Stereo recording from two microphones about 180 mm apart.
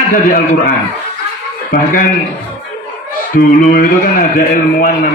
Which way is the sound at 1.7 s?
55° left (ahead or behind).